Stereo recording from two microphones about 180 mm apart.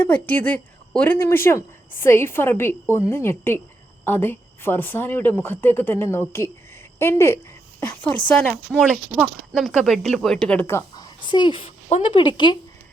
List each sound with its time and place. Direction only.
0.0 s a woman's voice: 10° left (ahead or behind)
8.4 s speech: 5° right (ahead or behind); by 12.5 s 25° left (ahead or behind)